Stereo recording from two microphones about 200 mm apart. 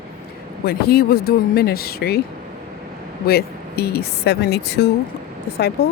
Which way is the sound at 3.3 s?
50° left (ahead or behind).